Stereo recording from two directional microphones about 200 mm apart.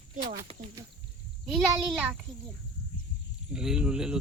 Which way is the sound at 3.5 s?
5° right (ahead or behind).